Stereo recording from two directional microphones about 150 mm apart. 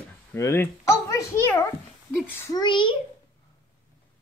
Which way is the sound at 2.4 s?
30° left (ahead or behind).